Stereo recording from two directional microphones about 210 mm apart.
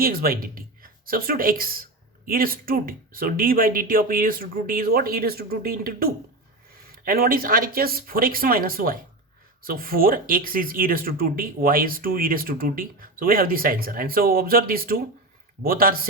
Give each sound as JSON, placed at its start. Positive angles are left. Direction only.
{"t": 0.0, "sound": "speech", "side_deg": -45}